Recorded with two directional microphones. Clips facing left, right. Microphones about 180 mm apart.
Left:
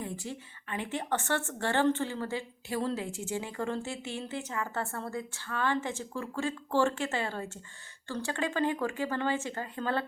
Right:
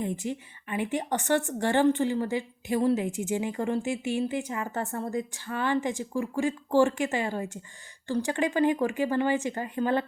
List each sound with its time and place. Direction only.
0.0 s a woman's voice: 20° right (ahead or behind)